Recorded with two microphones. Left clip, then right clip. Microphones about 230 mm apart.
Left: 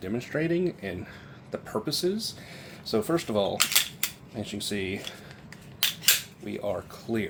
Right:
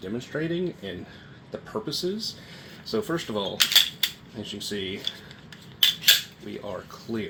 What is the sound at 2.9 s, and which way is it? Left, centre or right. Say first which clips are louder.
Speech: left 2 dB; left.